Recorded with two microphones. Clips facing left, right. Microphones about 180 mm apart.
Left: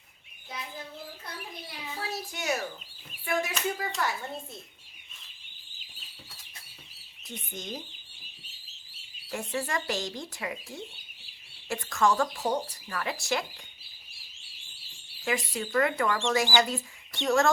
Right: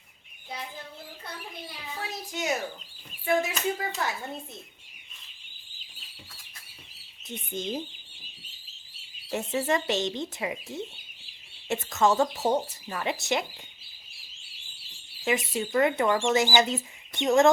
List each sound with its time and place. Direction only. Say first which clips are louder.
2.3 s speech: right 3 dB; 20° right (ahead or behind)
7.3 s speech: right 6 dB; 30° right (ahead or behind)
9.3 s speech: right 5 dB; 20° right (ahead or behind)
15.2 s speech: right 3 dB; 20° right (ahead or behind)